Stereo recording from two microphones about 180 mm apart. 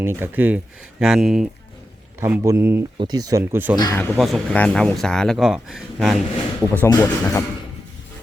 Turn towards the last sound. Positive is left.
turn(degrees=15)  # may be behind; listen again after turning